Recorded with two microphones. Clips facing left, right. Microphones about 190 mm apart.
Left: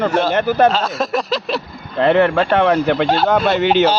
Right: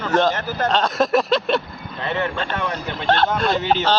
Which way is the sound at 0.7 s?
Centre (ahead or behind).